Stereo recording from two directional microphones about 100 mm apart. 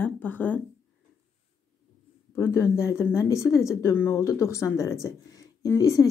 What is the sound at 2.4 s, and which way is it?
Speech, 25° left (ahead or behind).